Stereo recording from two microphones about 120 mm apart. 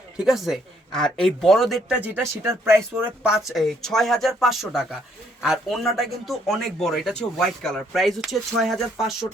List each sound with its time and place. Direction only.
0.2 s speech: 5° right (ahead or behind)
2.0 s speech: 15° right (ahead or behind)
3.5 s speech: centre (ahead or behind)